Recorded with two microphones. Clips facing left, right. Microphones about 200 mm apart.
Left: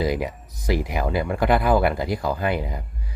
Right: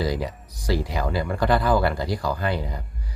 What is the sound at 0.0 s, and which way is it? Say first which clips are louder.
Speech: left 2 dB; 20° left (ahead or behind).